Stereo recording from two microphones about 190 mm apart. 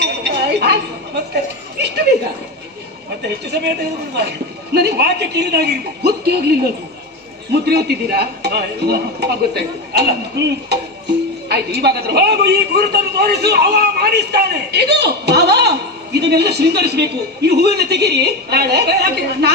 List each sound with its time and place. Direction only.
0.0 s chink: 60° right (ahead or behind)
3.5 s a man's voice: 60° right (ahead or behind)